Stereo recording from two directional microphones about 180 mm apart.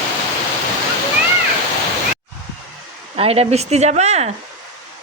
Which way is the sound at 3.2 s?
35° right (ahead or behind).